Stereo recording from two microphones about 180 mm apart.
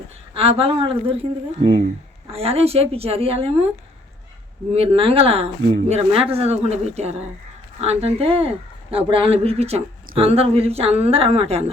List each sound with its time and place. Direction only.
0.3 s speech: 30° right (ahead or behind)
4.7 s speech: 30° right (ahead or behind)